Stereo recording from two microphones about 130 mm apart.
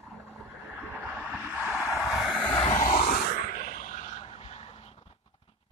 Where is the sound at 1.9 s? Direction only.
5° right (ahead or behind).